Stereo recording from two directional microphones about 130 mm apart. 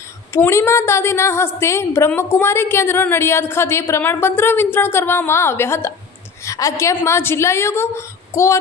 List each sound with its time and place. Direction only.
0.3 s a woman's voice: 20° left (ahead or behind)